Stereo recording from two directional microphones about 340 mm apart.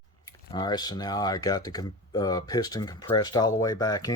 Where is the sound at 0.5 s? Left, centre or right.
Centre.